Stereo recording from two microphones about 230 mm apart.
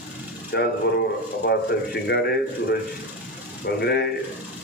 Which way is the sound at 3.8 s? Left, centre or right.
Left.